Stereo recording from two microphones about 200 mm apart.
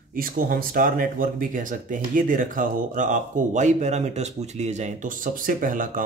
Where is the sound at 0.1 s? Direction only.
45° right (ahead or behind).